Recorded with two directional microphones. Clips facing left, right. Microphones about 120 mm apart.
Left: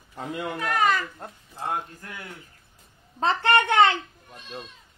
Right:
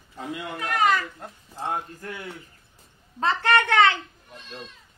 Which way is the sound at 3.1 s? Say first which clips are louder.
Even; 20° left (ahead or behind).